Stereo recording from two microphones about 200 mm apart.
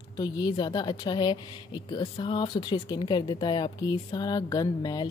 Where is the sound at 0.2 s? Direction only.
20° left (ahead or behind).